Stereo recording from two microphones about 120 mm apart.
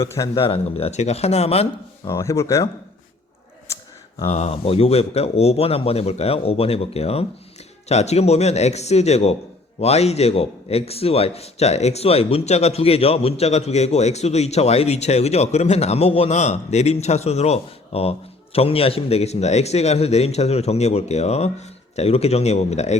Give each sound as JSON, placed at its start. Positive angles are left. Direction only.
{"t": 0.0, "sound": "speech", "side_deg": 25}
{"t": 0.3, "sound": "speech", "side_deg": 55}
{"t": 2.0, "sound": "speech", "side_deg": 25}
{"t": 4.3, "sound": "speech", "side_deg": 60}